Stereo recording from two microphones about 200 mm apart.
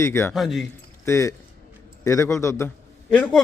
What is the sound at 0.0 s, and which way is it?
Speech, 10° left (ahead or behind).